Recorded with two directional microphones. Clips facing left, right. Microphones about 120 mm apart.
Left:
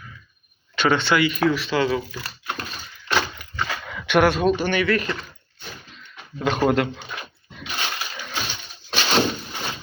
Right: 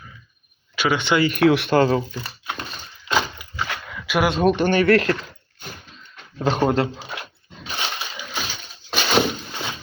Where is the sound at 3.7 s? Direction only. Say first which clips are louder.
Left 5 dB; centre (ahead or behind).